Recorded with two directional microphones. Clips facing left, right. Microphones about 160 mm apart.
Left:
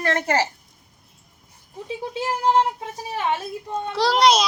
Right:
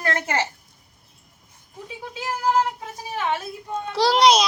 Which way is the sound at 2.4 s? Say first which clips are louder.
Left 2 dB; 30° left (ahead or behind).